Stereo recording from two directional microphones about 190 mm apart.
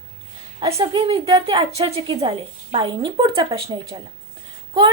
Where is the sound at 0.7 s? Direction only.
25° right (ahead or behind).